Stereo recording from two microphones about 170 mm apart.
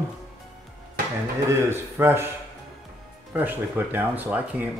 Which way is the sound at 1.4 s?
15° right (ahead or behind).